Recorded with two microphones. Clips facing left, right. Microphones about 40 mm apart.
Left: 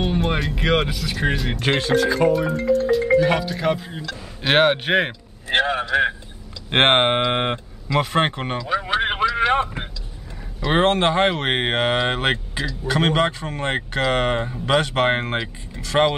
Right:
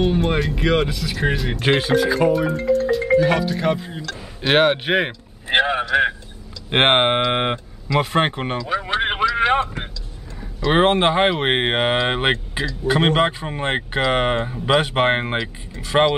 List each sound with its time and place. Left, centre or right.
0.0 s speech: centre
5.5 s a man's voice: centre
8.6 s a sound: centre
10.7 s speech: centre